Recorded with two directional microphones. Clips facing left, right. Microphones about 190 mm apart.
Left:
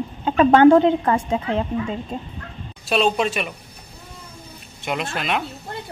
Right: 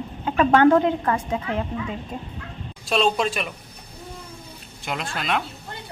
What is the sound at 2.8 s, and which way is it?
Speech, 5° left (ahead or behind).